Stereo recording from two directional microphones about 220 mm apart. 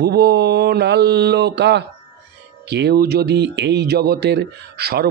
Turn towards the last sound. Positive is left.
turn(degrees=-45)  # may be behind; listen again after turning